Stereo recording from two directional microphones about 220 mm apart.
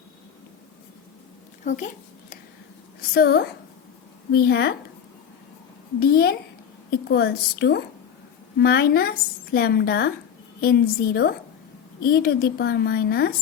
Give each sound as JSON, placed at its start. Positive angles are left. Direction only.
{"t": 1.6, "sound": "speech", "side_deg": 35}
{"t": 3.0, "sound": "a woman's voice", "side_deg": 45}
{"t": 6.0, "sound": "a woman's voice", "side_deg": 45}